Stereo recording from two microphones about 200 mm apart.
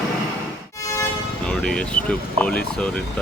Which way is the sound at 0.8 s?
15° left (ahead or behind).